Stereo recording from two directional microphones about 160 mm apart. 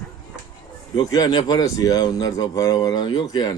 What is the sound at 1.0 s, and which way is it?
Speech, 25° left (ahead or behind).